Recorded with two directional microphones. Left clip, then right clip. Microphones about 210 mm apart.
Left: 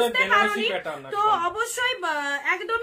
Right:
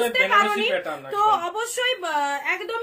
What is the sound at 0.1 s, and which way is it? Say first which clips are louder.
A woman's voice: right 2 dB; 15° left (ahead or behind).